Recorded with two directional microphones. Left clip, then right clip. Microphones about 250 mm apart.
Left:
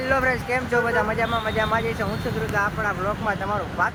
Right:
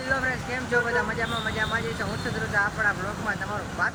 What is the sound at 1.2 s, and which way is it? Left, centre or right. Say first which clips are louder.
Speech: left 5 dB; centre.